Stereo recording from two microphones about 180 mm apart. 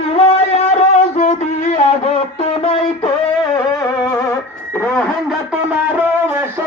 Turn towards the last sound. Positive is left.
turn(degrees=-10)  # may be behind; listen again after turning